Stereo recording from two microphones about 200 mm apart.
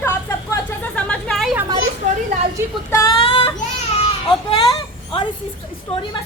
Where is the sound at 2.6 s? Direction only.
15° right (ahead or behind).